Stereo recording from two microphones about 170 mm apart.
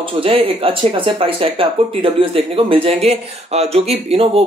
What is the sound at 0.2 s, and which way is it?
Speech, 35° right (ahead or behind).